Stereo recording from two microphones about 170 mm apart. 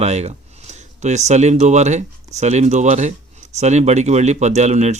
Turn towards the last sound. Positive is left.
turn(degrees=-40)  # may be behind; listen again after turning